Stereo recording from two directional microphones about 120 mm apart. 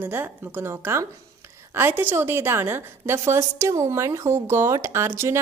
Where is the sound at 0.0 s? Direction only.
15° right (ahead or behind).